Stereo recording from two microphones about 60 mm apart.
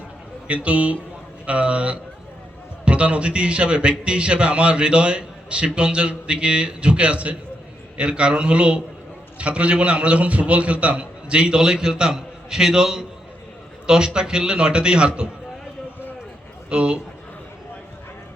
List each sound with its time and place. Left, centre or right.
0.4 s a man's voice: right
16.6 s a man's voice: centre